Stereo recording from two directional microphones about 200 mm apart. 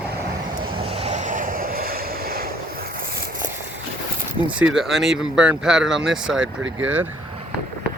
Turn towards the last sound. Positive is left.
turn(degrees=-75)  # may be behind; listen again after turning